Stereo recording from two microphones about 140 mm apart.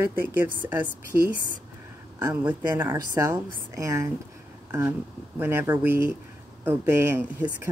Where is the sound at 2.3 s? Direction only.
10° right (ahead or behind).